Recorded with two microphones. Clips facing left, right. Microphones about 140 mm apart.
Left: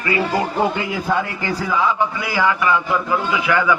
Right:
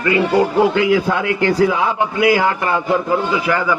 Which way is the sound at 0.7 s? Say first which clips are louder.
Right 6 dB; 80° right.